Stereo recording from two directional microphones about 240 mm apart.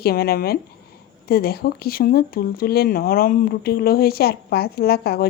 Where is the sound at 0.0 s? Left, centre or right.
Left.